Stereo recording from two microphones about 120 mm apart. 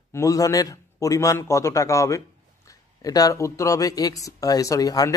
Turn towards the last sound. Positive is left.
turn(degrees=30)  # may be behind; listen again after turning